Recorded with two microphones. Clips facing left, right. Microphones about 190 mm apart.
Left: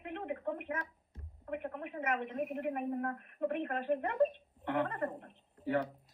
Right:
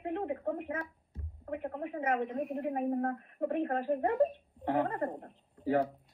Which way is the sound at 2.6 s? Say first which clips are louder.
Right 6 dB; 30° right (ahead or behind).